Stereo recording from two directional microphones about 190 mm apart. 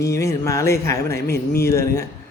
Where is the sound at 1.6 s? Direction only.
15° left (ahead or behind).